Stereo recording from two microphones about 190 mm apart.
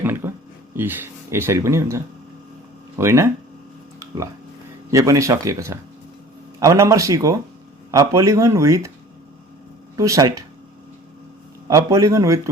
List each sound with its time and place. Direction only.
0.0 s a sound: 10° right (ahead or behind)
0.8 s speech: 10° right (ahead or behind)
3.0 s speech: 15° right (ahead or behind)
4.9 s speech: 15° right (ahead or behind)
9.9 s speech: 20° right (ahead or behind)
11.7 s speech: 15° right (ahead or behind)